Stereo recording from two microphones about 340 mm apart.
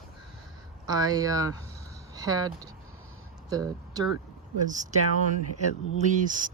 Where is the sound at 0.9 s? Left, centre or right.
Centre.